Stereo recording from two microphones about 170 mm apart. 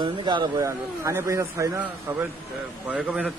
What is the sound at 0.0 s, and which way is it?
A man's voice, 25° right (ahead or behind).